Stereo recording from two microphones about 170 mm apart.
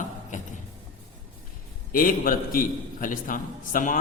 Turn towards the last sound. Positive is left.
turn(degrees=50)  # may be behind; listen again after turning